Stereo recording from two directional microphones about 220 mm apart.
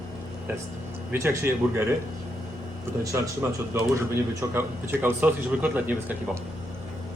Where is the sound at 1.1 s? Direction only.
10° right (ahead or behind).